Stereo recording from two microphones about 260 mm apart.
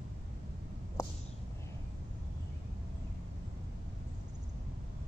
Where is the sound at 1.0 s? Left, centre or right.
Centre.